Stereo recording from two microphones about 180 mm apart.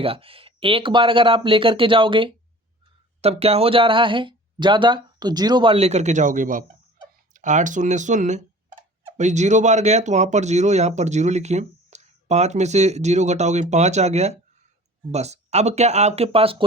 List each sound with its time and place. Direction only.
0.0 s speech: 30° right (ahead or behind)